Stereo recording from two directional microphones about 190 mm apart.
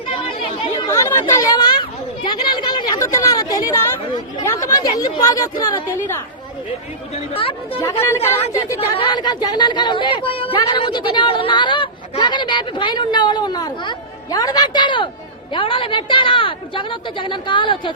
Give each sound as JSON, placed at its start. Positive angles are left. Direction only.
{"t": 0.1, "sound": "chatter", "side_deg": 30}
{"t": 0.9, "sound": "chatter", "side_deg": 15}
{"t": 4.6, "sound": "speech", "side_deg": 20}
{"t": 7.1, "sound": "speech", "side_deg": 30}
{"t": 8.0, "sound": "speech", "side_deg": 15}
{"t": 9.0, "sound": "speech", "side_deg": 25}